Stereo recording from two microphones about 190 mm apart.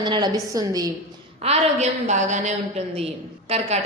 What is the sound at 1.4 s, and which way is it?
A woman's voice, 35° right (ahead or behind).